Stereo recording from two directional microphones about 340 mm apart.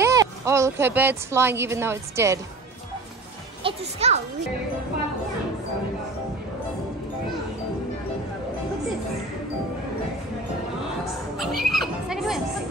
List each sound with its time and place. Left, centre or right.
0.0 s a woman's voice: centre
3.6 s speech: centre
11.3 s horse: centre